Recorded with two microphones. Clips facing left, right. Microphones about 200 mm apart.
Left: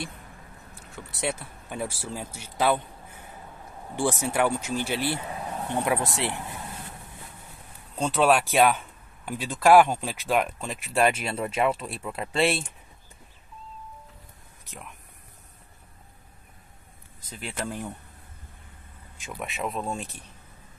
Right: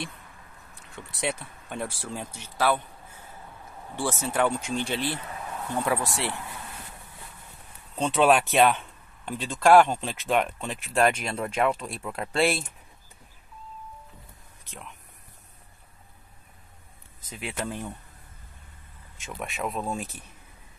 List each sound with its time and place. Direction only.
0.7 s speech: centre (ahead or behind)
5.4 s a sound: 35° left (ahead or behind)
5.7 s speech: 20° left (ahead or behind)
7.9 s speech: centre (ahead or behind)
14.7 s speech: 5° left (ahead or behind)
17.3 s speech: 5° right (ahead or behind)
19.2 s speech: centre (ahead or behind)